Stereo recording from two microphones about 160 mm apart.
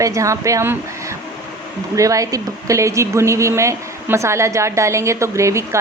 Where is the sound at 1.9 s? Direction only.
20° right (ahead or behind).